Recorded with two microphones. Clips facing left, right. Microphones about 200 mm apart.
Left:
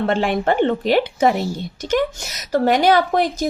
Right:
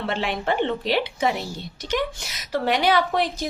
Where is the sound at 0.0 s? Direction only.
50° left (ahead or behind).